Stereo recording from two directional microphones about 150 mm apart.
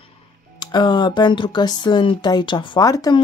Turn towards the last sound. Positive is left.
turn(degrees=25)  # may be behind; listen again after turning